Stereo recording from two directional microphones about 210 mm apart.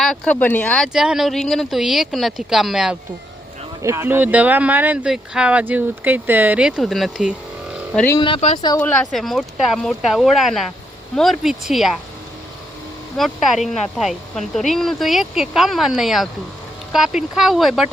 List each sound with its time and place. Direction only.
0.0 s speech: 5° left (ahead or behind)
8.2 s speech: 30° left (ahead or behind)
8.8 s speech: 5° left (ahead or behind)
13.1 s speech: centre (ahead or behind)